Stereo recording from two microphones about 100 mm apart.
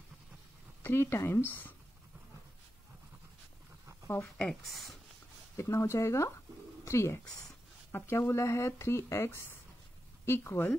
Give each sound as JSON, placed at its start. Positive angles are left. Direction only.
{"t": 0.8, "sound": "speech", "side_deg": 25}
{"t": 4.4, "sound": "speech", "side_deg": 5}
{"t": 5.6, "sound": "speech", "side_deg": 30}
{"t": 7.2, "sound": "speech", "side_deg": 5}
{"t": 7.9, "sound": "speech", "side_deg": 25}